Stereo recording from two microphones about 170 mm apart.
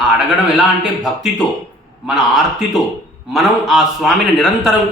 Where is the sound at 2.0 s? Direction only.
Centre (ahead or behind).